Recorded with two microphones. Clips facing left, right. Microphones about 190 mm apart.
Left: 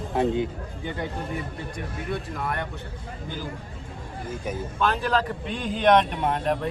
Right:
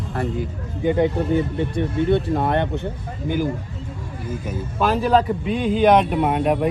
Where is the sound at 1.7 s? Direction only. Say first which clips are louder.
Right 13 dB; 30° right (ahead or behind).